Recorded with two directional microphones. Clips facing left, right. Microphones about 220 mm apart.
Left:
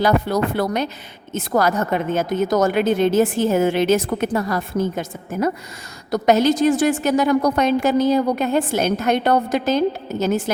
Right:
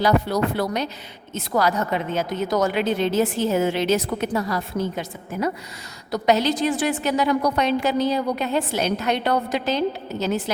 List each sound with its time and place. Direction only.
0.0 s a woman's voice: 50° left (ahead or behind)